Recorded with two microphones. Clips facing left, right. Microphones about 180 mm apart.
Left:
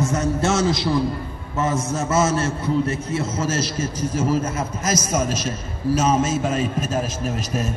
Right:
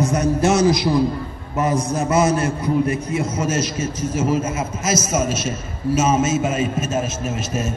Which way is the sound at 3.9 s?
10° left (ahead or behind).